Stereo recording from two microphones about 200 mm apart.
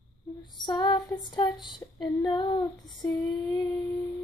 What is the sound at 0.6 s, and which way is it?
Female singing, 20° left (ahead or behind).